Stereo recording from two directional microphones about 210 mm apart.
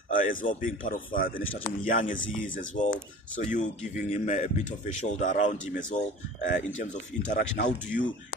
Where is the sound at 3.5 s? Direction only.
35° left (ahead or behind).